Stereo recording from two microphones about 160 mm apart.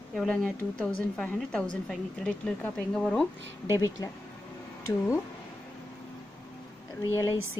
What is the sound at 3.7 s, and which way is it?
A woman's voice, 20° left (ahead or behind).